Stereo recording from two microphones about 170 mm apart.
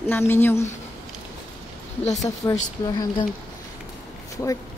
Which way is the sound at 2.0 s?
40° left (ahead or behind).